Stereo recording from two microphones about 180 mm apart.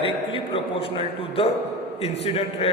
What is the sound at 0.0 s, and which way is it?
A man's voice, 30° left (ahead or behind).